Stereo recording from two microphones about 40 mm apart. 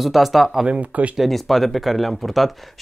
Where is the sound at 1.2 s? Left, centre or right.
Centre.